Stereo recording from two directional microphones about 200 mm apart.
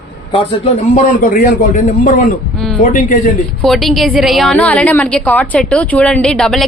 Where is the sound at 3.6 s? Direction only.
Centre (ahead or behind).